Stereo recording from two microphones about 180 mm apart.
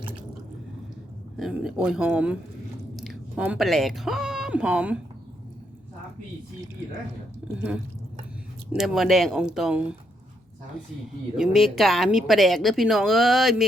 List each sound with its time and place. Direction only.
1.4 s speech: 5° right (ahead or behind)
7.4 s a woman's voice: 10° right (ahead or behind)
11.3 s a woman's voice: centre (ahead or behind)